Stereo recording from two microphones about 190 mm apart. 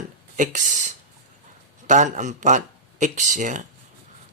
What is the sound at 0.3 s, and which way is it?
Speech, 40° right (ahead or behind).